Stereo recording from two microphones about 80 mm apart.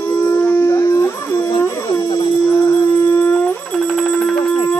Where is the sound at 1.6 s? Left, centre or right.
Left.